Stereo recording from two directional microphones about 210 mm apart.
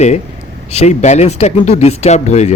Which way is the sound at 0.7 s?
30° left (ahead or behind).